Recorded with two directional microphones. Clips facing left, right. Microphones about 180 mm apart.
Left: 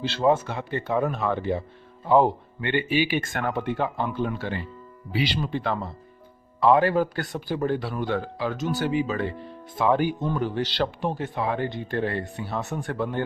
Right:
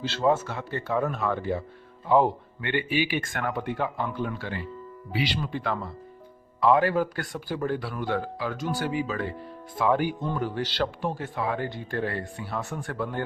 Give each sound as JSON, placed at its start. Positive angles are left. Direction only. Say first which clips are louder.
{"t": 0.0, "sound": "speech", "louder": "left 2 dB", "side_deg": 15}
{"t": 2.0, "sound": "speech", "louder": "left 2 dB", "side_deg": 30}